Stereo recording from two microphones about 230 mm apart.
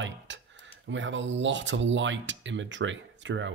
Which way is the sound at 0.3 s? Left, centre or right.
Right.